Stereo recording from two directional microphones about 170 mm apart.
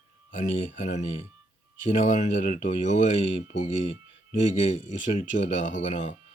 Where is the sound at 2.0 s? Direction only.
45° left (ahead or behind).